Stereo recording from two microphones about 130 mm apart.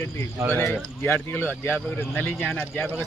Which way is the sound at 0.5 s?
15° left (ahead or behind).